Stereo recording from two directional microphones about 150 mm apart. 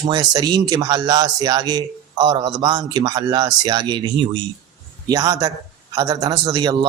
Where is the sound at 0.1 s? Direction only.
30° right (ahead or behind).